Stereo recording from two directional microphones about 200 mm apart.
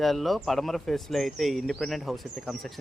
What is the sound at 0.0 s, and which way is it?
Speech, centre (ahead or behind).